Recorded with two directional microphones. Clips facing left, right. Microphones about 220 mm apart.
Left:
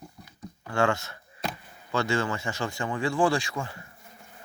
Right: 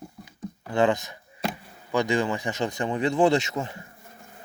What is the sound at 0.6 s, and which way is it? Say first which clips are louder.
Speech: right 3 dB; 20° right (ahead or behind).